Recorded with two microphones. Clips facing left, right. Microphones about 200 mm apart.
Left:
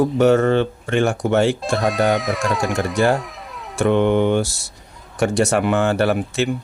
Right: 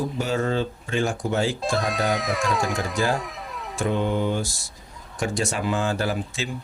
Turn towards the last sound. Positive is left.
turn(degrees=65)  # may be behind; listen again after turning